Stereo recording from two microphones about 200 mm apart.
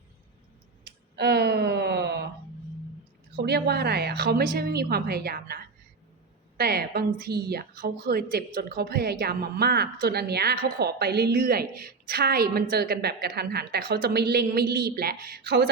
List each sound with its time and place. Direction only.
1.1 s a sound: 55° right (ahead or behind)
3.3 s a woman's voice: 55° right (ahead or behind)
6.6 s a woman's voice: 50° right (ahead or behind)